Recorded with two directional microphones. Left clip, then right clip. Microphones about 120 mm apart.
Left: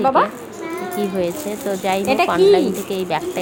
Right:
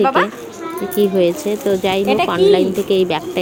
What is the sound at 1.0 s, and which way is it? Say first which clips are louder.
A woman's voice: right 8 dB; 40° right (ahead or behind).